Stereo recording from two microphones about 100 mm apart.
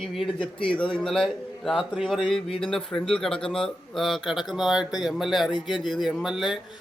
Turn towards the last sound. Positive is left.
turn(degrees=-5)  # may be behind; listen again after turning